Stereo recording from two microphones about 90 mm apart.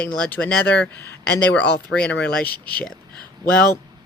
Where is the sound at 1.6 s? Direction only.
15° left (ahead or behind).